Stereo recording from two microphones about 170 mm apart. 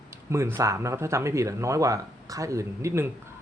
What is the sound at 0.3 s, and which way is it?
Speech, 15° right (ahead or behind).